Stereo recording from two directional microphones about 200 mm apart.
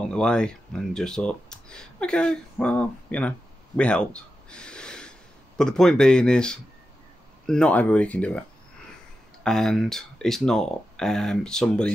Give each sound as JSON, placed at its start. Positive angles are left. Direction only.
{"t": 0.1, "sound": "speech", "side_deg": 5}